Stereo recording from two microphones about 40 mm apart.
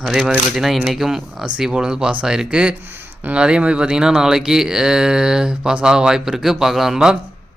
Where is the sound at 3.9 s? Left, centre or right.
Centre.